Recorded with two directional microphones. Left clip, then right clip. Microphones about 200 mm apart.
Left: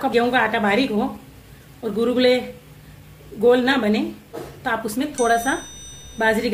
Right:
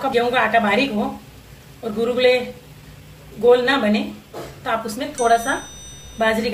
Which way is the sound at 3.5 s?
55° left (ahead or behind).